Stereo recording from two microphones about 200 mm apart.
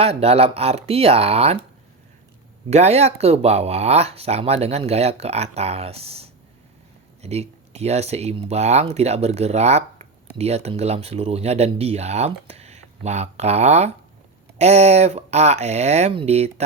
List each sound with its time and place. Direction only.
0.0 s speech: 30° right (ahead or behind)
2.6 s speech: 35° right (ahead or behind)